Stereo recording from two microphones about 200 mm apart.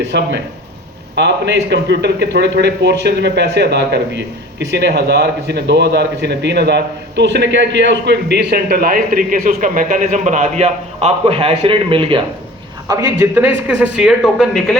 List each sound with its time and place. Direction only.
0.1 s a man's voice: 60° right (ahead or behind); by 12.2 s 25° right (ahead or behind)
12.9 s a man's voice: 15° right (ahead or behind)